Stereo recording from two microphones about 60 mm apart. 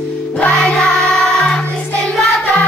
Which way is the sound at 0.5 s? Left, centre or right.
Centre.